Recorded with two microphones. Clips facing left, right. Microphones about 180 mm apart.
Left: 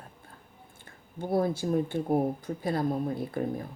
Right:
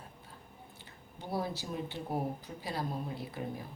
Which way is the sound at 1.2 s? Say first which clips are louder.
Left 9 dB; 50° left (ahead or behind).